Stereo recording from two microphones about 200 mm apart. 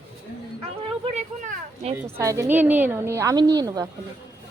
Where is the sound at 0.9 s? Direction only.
30° right (ahead or behind).